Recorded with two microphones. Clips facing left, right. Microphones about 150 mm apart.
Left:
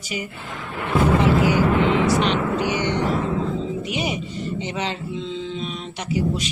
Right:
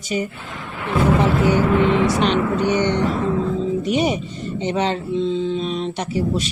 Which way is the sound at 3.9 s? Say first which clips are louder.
Right 6 dB; 40° right (ahead or behind).